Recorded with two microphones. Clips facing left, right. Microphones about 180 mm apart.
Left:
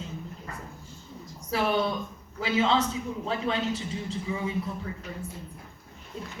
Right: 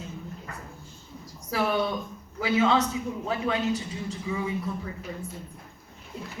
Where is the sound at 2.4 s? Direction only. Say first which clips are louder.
Right 2 dB; 25° left (ahead or behind).